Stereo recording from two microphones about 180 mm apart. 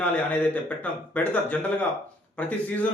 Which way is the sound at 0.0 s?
10° left (ahead or behind).